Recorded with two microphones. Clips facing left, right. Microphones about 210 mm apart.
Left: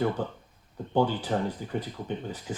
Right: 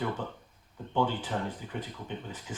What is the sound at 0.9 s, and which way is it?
Speech, 40° left (ahead or behind).